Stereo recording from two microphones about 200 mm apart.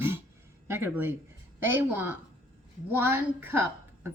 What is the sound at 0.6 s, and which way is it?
A woman's voice, 10° right (ahead or behind).